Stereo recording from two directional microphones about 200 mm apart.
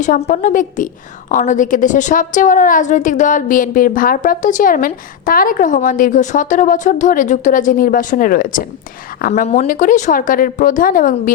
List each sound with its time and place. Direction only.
0.0 s a woman's voice: 40° left (ahead or behind)
9.5 s a woman's voice: 35° left (ahead or behind)